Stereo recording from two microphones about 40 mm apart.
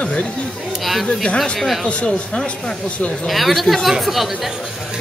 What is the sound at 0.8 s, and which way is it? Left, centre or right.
Speech, centre.